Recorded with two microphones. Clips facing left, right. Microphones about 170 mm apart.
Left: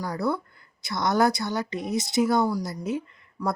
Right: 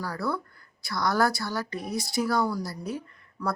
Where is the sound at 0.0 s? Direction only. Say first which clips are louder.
Left 3 dB; 20° left (ahead or behind).